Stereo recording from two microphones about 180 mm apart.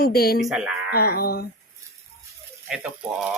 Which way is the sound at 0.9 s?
60° left (ahead or behind).